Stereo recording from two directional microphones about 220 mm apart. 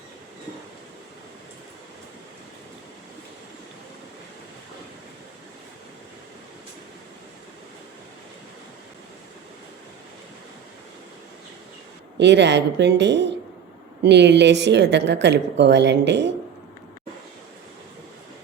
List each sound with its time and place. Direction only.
12.2 s a woman's voice: 50° right (ahead or behind)